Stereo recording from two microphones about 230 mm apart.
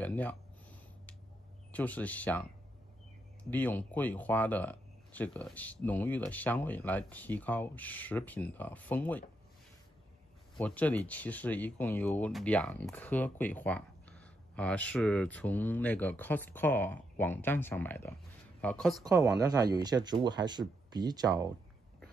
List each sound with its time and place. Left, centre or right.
0.0 s a sound: centre
1.7 s speech: centre
3.4 s speech: centre
10.5 s speech: centre
19.0 s speech: centre